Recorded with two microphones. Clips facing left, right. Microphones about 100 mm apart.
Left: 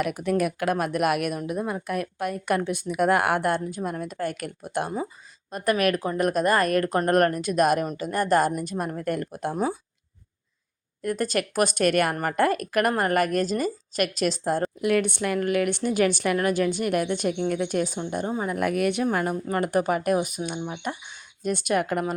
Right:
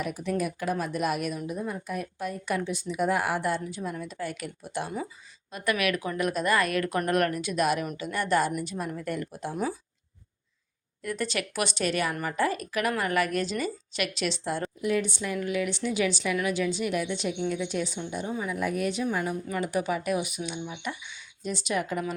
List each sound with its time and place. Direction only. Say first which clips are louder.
0.0 s speech: left 5 dB; 60° left (ahead or behind)
11.0 s speech: left 5 dB; 45° left (ahead or behind)
14.8 s speech: left 5 dB; 65° left (ahead or behind)
19.1 s speech: left 4 dB; 55° left (ahead or behind)